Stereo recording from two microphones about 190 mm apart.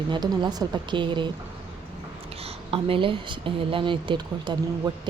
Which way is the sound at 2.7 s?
30° right (ahead or behind).